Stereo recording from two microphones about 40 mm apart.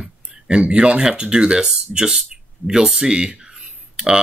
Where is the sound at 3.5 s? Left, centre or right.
Centre.